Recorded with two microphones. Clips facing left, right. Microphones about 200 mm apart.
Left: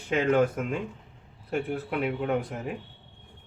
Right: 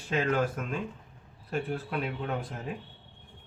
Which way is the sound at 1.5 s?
15° left (ahead or behind).